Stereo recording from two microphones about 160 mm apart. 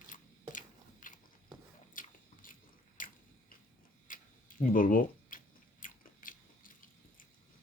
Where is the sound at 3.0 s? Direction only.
55° left (ahead or behind).